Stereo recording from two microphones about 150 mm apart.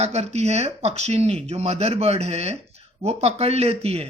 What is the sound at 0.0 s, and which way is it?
Speech, 45° right (ahead or behind).